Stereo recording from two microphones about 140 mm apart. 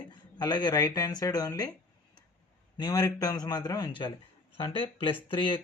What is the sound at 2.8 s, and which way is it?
A man's voice, 25° left (ahead or behind).